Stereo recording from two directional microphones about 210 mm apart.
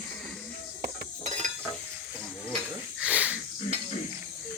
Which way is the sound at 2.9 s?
5° right (ahead or behind).